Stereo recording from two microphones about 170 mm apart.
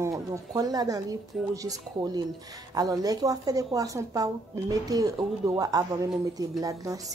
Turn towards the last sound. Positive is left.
turn(degrees=-20)  # may be behind; listen again after turning